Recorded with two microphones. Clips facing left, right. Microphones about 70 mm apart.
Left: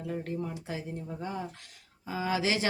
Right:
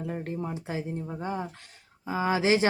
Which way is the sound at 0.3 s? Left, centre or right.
Right.